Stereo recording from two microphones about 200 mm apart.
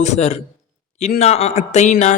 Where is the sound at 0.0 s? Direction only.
35° left (ahead or behind).